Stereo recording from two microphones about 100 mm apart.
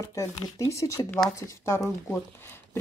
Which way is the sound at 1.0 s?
5° left (ahead or behind).